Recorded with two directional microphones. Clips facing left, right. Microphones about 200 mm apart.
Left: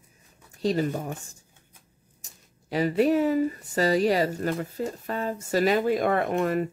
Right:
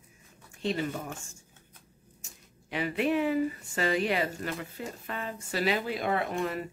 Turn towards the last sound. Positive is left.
turn(degrees=55)  # may be behind; listen again after turning